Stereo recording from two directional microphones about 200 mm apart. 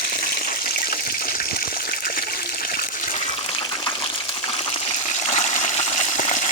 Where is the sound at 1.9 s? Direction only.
45° left (ahead or behind).